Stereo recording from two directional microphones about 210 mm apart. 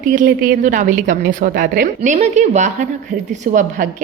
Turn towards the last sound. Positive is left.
turn(degrees=-40)  # may be behind; listen again after turning